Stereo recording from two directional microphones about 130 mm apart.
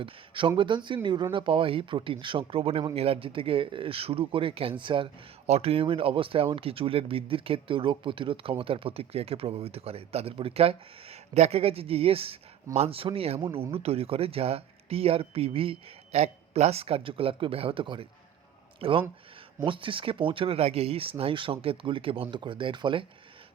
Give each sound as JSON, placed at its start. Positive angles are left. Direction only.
{"t": 0.0, "sound": "speech", "side_deg": -40}
{"t": 5.5, "sound": "speech", "side_deg": -50}